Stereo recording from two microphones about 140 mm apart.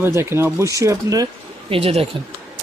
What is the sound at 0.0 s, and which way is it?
Speech, 15° right (ahead or behind).